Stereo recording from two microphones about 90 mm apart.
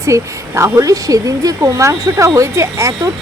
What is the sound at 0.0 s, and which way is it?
Speech, 35° right (ahead or behind).